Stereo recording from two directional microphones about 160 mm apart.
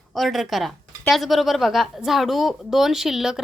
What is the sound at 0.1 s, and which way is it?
A woman's voice, centre (ahead or behind).